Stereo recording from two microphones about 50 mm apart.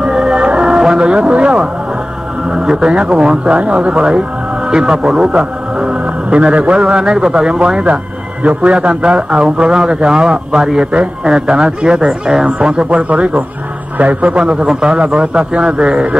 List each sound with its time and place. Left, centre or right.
0.0 s music: centre
0.9 s a sound: centre
2.5 s a man's voice: centre